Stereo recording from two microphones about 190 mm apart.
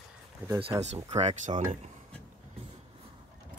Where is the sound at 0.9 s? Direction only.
35° right (ahead or behind).